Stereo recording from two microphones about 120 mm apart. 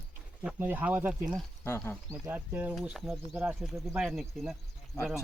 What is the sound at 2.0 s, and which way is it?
Speech, 20° right (ahead or behind).